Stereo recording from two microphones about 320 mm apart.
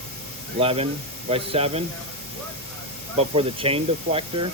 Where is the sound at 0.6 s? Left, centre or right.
Centre.